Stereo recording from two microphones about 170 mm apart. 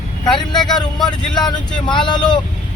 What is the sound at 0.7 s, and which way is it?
Speech, 5° left (ahead or behind).